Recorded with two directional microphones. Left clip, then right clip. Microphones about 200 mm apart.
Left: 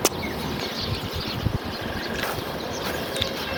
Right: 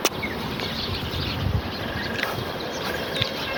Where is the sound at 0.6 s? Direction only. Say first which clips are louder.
Right 1 dB; 70° left (ahead or behind).